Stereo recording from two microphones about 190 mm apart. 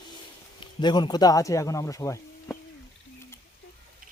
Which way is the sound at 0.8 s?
25° left (ahead or behind).